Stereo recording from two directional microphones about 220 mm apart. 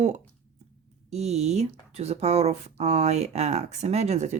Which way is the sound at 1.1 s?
30° right (ahead or behind).